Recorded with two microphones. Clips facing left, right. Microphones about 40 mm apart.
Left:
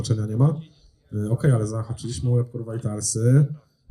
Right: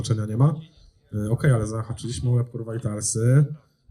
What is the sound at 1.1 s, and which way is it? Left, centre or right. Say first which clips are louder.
Speech: even; right.